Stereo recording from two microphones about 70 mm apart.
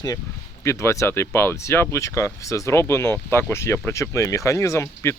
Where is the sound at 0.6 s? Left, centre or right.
Left.